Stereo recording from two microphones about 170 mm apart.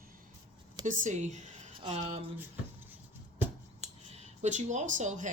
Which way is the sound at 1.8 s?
35° right (ahead or behind).